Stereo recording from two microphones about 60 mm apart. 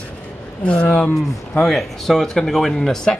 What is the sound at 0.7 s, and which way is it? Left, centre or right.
Speech, left.